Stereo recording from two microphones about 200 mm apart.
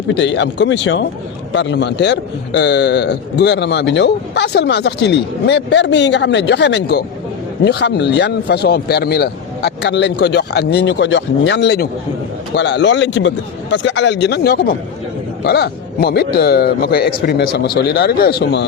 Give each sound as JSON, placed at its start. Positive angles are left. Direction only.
{"t": 0.1, "sound": "a man's voice", "side_deg": 65}